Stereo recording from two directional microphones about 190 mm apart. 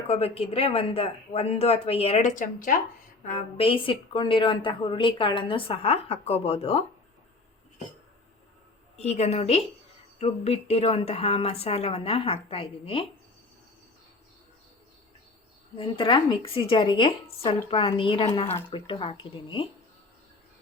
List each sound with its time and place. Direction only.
0.1 s a woman's voice: 30° left (ahead or behind)
3.2 s a woman's voice: 35° left (ahead or behind)
9.0 s a woman's voice: 35° left (ahead or behind)
15.8 s a woman's voice: 25° left (ahead or behind)